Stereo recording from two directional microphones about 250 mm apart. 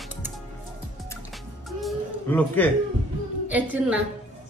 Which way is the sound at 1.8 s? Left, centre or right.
Centre.